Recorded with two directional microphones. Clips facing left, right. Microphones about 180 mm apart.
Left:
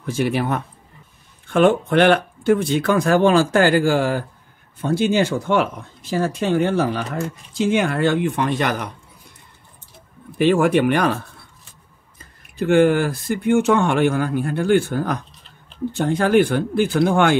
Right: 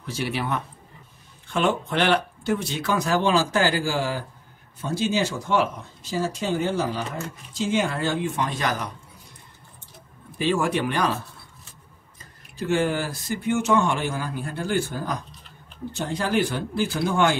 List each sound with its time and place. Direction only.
0.0 s speech: 50° left (ahead or behind)
10.3 s speech: 60° left (ahead or behind)
12.5 s speech: 60° left (ahead or behind)